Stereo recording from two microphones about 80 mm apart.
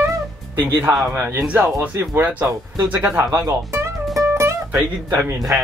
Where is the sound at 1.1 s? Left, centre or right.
Right.